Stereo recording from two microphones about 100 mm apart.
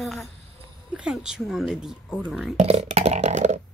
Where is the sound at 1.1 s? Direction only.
5° right (ahead or behind).